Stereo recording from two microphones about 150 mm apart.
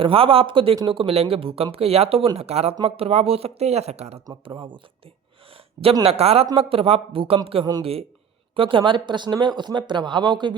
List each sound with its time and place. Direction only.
0.0 s speech: 35° right (ahead or behind)
4.3 s speech: 35° right (ahead or behind)
6.0 s speech: 40° right (ahead or behind)